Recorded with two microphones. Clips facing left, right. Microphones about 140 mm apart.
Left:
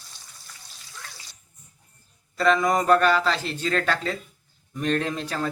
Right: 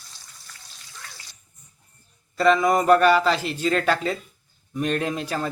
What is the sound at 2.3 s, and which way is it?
A man's voice, 5° right (ahead or behind).